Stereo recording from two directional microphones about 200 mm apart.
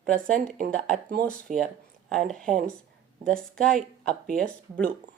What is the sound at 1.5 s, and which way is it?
Speech, 40° right (ahead or behind).